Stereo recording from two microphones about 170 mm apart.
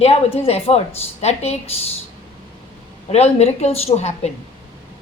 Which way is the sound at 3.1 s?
40° left (ahead or behind).